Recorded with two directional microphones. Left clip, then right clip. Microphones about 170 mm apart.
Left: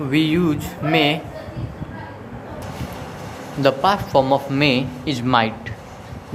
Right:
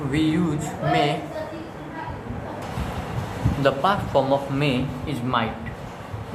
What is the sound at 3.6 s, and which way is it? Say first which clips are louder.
Speech: left 4 dB; 50° left (ahead or behind).